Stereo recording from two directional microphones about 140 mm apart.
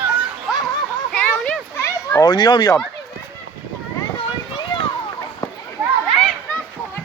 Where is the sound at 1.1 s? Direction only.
10° left (ahead or behind).